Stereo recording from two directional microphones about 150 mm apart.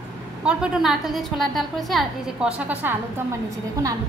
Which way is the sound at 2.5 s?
10° right (ahead or behind).